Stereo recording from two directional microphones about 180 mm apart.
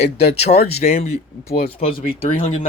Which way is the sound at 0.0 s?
35° left (ahead or behind).